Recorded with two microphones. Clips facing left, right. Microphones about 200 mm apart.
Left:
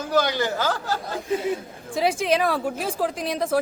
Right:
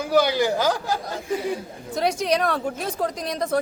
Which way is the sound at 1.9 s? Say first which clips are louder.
Left 1 dB; centre (ahead or behind).